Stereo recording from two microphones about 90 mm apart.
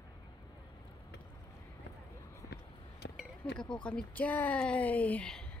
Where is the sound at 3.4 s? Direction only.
10° left (ahead or behind).